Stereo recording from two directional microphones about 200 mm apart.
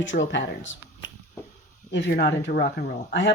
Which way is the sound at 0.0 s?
65° left (ahead or behind).